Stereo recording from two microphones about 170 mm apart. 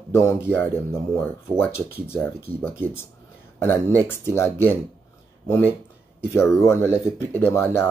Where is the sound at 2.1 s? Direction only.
10° left (ahead or behind).